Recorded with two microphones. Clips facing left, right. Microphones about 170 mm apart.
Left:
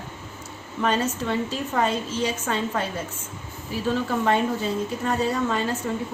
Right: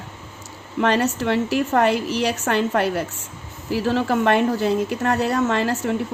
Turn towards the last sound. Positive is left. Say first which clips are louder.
# right 4 dB
turn(degrees=-75)  # may be behind; listen again after turning